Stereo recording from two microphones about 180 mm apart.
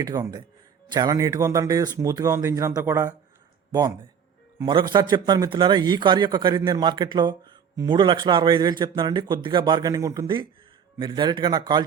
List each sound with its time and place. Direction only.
0.0 s a man's voice: 20° right (ahead or behind)